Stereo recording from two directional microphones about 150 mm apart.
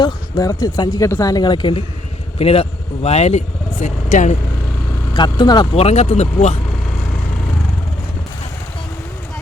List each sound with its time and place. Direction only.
0.0 s speech: 25° left (ahead or behind); by 4.4 s 55° left (ahead or behind)
5.1 s speech: 30° left (ahead or behind)
5.7 s speech: 45° left (ahead or behind)